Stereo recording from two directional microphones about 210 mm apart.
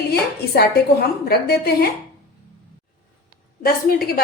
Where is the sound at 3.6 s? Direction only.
45° left (ahead or behind).